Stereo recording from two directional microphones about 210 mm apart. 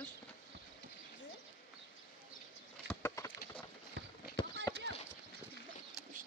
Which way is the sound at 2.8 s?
10° left (ahead or behind).